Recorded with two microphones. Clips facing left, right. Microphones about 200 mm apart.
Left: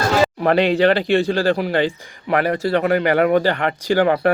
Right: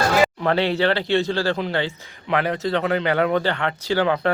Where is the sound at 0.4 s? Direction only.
15° left (ahead or behind).